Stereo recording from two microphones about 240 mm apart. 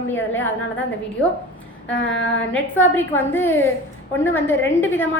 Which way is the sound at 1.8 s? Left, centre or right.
Left.